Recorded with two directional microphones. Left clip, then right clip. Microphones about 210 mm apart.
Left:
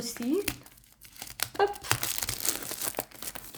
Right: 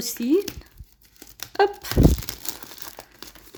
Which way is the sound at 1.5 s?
50° right (ahead or behind).